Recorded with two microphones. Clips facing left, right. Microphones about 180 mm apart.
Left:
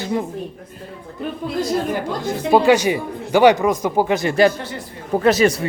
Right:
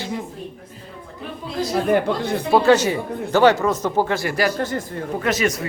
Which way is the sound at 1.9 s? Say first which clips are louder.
Right 4 dB; 60° right (ahead or behind).